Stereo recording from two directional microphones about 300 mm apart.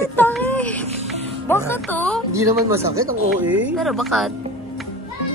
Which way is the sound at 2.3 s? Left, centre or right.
Centre.